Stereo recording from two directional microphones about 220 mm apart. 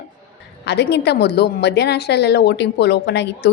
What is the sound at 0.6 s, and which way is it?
A woman's voice, 50° left (ahead or behind).